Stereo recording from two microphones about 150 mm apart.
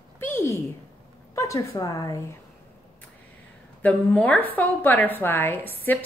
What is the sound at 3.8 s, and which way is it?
A woman's voice, 10° left (ahead or behind).